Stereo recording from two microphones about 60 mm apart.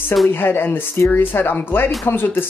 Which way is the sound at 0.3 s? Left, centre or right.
Left.